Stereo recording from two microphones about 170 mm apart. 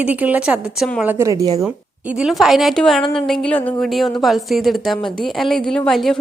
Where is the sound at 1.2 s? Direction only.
20° right (ahead or behind).